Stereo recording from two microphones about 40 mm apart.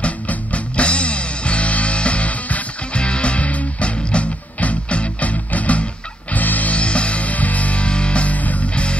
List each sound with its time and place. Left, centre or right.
0.0 s music: left
6.8 s music: left